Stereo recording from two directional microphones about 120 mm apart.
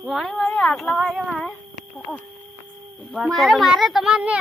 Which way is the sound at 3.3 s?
Centre (ahead or behind).